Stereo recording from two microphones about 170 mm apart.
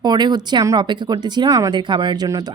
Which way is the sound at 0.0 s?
25° right (ahead or behind).